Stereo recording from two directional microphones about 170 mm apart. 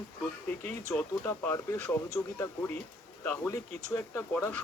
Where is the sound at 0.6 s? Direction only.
15° left (ahead or behind).